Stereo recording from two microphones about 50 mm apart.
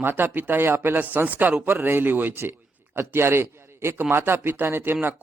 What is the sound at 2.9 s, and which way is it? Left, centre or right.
A man's voice, right.